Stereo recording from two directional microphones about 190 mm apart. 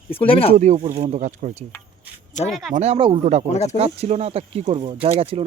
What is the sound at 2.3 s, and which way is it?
Speech, 35° left (ahead or behind).